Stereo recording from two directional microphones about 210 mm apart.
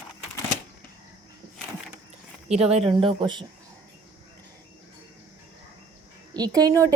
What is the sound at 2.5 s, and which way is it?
Speech, 30° right (ahead or behind).